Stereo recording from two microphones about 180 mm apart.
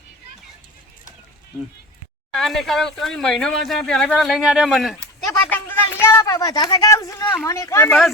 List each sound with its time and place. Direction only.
2.3 s speech: centre (ahead or behind)